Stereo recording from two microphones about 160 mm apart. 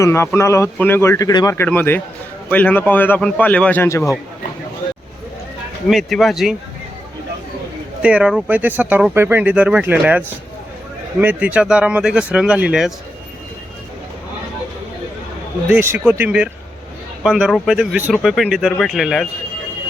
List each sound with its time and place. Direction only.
0.0 s a man's voice: 15° left (ahead or behind)
1.3 s speech: 25° left (ahead or behind)
1.5 s a man's voice: 10° left (ahead or behind)
5.9 s speech: centre (ahead or behind)
8.0 s speech: 5° right (ahead or behind)
15.7 s speech: 15° right (ahead or behind)